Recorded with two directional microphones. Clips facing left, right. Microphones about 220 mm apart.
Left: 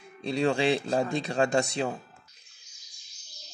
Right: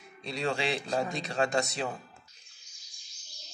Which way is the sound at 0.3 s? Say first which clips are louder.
Left 7 dB; 30° left (ahead or behind).